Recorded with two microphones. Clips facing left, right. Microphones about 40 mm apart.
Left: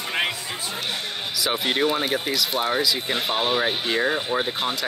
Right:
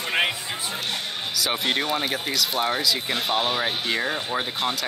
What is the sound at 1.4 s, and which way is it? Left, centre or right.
Speech, centre.